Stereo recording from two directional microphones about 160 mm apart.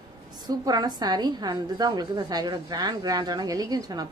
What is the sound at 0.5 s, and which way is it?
A woman's voice, 25° right (ahead or behind).